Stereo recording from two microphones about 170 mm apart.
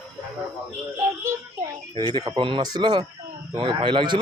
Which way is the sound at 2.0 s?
25° right (ahead or behind).